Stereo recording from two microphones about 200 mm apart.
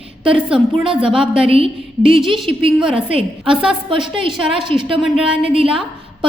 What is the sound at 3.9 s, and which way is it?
A woman's voice, 25° right (ahead or behind).